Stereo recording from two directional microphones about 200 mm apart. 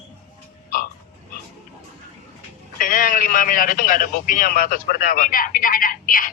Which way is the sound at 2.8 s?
45° left (ahead or behind).